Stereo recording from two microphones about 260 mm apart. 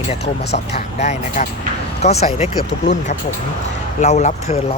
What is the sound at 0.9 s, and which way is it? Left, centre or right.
Speech, left.